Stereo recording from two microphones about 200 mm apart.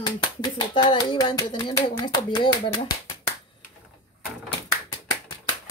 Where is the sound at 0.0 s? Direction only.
25° left (ahead or behind).